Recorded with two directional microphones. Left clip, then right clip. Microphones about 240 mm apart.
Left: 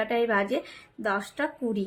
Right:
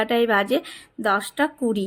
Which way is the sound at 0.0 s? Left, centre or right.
Right.